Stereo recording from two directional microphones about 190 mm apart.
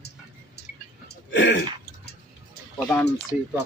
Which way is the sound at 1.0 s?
70° left (ahead or behind).